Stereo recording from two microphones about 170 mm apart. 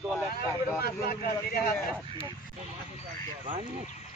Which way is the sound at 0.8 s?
65° left (ahead or behind).